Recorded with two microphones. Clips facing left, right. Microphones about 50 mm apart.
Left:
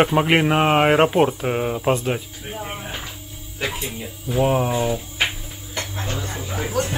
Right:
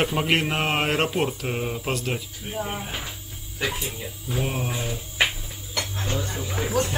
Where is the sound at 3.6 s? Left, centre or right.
Left.